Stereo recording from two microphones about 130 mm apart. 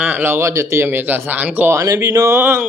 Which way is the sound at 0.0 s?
10° right (ahead or behind).